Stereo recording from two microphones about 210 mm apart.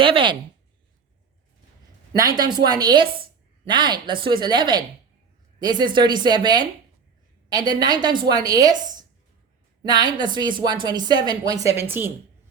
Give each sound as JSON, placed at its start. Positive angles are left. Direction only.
{"t": 0.0, "sound": "a woman's voice", "side_deg": -25}
{"t": 2.1, "sound": "a woman's voice", "side_deg": -20}